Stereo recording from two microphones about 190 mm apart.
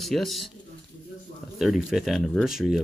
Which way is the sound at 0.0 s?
Centre (ahead or behind).